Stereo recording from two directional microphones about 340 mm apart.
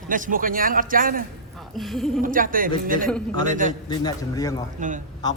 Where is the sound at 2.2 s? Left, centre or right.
Right.